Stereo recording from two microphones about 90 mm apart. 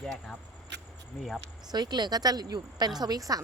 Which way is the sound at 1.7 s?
55° right (ahead or behind).